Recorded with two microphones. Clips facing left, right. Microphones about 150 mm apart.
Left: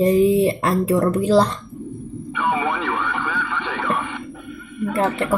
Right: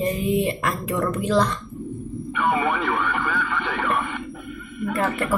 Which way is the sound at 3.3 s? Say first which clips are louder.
Even; 5° right (ahead or behind).